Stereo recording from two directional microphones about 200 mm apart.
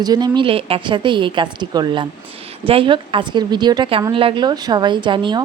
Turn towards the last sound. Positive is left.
turn(degrees=-25)  # may be behind; listen again after turning